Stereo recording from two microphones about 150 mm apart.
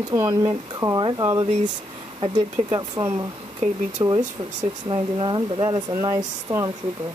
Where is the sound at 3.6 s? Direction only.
50° right (ahead or behind).